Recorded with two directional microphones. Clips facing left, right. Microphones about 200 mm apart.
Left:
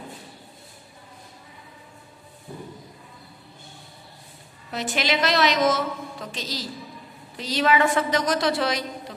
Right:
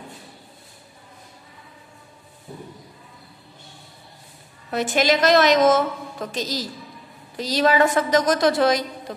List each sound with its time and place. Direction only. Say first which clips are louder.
4.6 s a woman's voice: right 6 dB; 50° right (ahead or behind)